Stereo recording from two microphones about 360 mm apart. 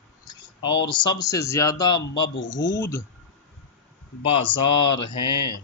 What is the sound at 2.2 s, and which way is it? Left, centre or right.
Speech, left.